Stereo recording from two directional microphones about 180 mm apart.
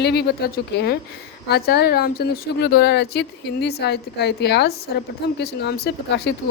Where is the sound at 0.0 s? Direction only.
65° left (ahead or behind).